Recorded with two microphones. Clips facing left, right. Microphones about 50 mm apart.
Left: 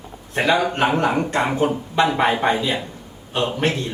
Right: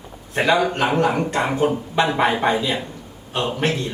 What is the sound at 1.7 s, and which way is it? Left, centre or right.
Speech, centre.